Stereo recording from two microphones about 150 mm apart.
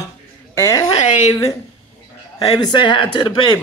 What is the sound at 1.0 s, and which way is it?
Speech, 55° left (ahead or behind).